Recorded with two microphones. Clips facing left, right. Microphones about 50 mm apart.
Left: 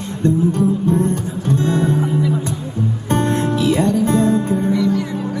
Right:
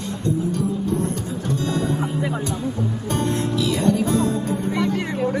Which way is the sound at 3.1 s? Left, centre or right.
Left.